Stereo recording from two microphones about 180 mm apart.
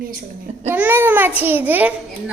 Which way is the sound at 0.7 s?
10° right (ahead or behind).